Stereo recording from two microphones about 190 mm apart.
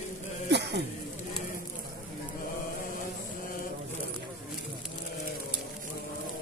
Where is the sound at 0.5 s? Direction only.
65° right (ahead or behind).